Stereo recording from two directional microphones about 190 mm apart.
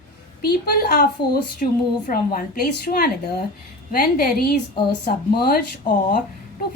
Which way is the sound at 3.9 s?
55° left (ahead or behind).